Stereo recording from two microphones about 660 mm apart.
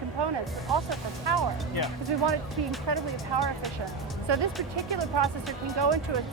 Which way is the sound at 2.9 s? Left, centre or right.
Right.